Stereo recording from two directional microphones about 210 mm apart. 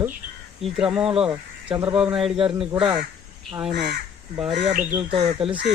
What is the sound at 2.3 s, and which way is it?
Speech, 25° right (ahead or behind).